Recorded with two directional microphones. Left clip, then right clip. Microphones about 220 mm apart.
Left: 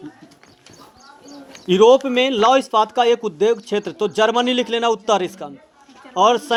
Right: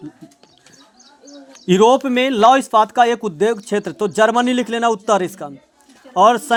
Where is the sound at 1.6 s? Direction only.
50° right (ahead or behind).